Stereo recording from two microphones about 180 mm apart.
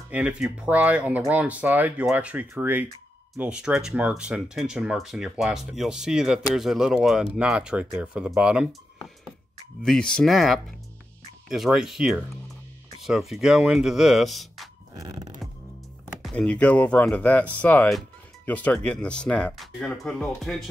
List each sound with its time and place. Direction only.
0.1 s speech: 5° right (ahead or behind)
9.8 s speech: 5° left (ahead or behind)
15.0 s a sound: 20° right (ahead or behind)
16.2 s speech: 5° left (ahead or behind)